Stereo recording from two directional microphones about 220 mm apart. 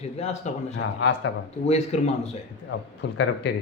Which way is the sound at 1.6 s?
30° left (ahead or behind).